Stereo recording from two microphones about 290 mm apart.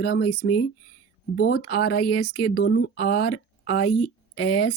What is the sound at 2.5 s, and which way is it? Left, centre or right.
Speech, left.